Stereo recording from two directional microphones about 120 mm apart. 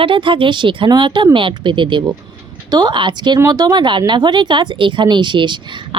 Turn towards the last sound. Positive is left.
turn(degrees=-40)  # may be behind; listen again after turning